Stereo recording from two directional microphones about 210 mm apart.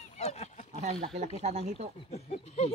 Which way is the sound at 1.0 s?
30° right (ahead or behind).